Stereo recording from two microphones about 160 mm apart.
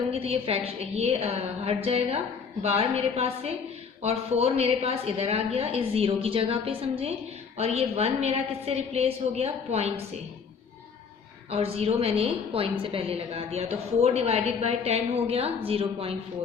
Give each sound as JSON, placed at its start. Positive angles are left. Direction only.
{"t": 0.1, "sound": "a woman's voice", "side_deg": -35}
{"t": 11.5, "sound": "a woman's voice", "side_deg": -40}